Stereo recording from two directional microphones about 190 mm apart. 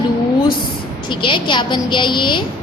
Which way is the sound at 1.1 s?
25° left (ahead or behind).